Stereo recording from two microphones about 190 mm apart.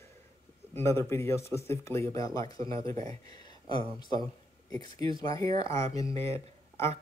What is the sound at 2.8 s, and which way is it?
Speech, 35° right (ahead or behind).